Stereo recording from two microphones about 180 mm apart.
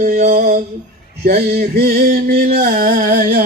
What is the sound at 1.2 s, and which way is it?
Male singing, 55° right (ahead or behind).